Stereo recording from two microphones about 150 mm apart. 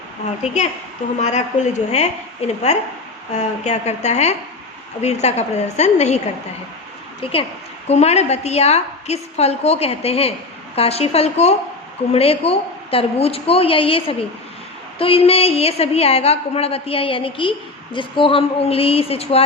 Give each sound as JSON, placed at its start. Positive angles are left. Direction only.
{"t": 0.4, "sound": "a woman's voice", "side_deg": 50}
{"t": 7.9, "sound": "a woman's voice", "side_deg": 45}